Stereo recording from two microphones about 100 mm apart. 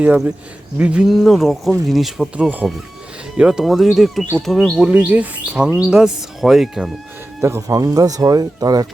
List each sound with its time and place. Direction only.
0.8 s speech: 15° right (ahead or behind)
1.0 s speech: centre (ahead or behind)
7.4 s speech: 30° right (ahead or behind)